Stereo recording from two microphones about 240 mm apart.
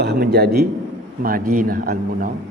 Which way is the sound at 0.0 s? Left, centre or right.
Right.